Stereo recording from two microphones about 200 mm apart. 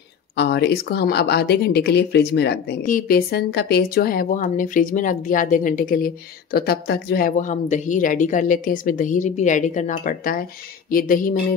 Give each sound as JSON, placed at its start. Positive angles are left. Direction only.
{"t": 0.4, "sound": "speech", "side_deg": 55}
{"t": 2.8, "sound": "speech", "side_deg": 40}
{"t": 10.9, "sound": "music", "side_deg": 45}